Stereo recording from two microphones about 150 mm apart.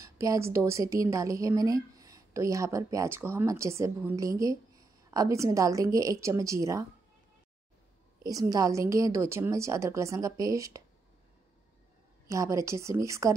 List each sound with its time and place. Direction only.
0.0 s a woman's voice: 20° right (ahead or behind)
8.2 s a woman's voice: 25° right (ahead or behind)
12.3 s a woman's voice: 20° right (ahead or behind)